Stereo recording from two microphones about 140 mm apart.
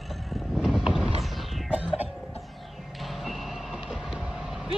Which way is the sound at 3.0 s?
Centre (ahead or behind).